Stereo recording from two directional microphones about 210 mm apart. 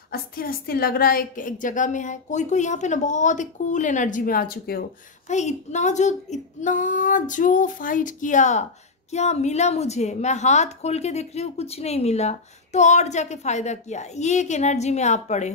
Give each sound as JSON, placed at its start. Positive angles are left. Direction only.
{"t": 0.1, "sound": "a woman's voice", "side_deg": 45}
{"t": 5.3, "sound": "a woman's voice", "side_deg": 35}